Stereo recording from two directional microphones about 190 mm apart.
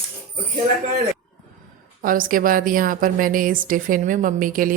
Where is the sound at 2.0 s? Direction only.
45° right (ahead or behind).